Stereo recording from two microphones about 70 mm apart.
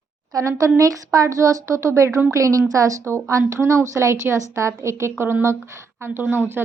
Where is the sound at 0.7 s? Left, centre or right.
Right.